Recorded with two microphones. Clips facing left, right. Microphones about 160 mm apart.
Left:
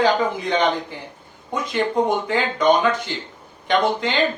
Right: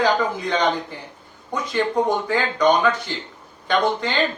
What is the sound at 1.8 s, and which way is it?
Speech, 30° left (ahead or behind).